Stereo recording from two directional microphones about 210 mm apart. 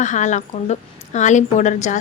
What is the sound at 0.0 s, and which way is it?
A woman's voice, 35° left (ahead or behind).